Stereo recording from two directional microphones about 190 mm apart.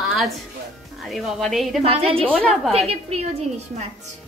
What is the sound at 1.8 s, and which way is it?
Speech, 30° right (ahead or behind).